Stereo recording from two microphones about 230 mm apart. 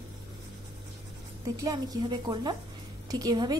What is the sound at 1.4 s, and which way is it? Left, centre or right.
A woman's voice, centre.